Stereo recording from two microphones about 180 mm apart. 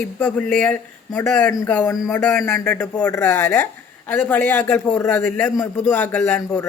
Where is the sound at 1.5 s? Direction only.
15° left (ahead or behind).